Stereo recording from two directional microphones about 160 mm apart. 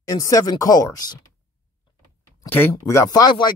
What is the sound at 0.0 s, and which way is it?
Speech, 20° left (ahead or behind).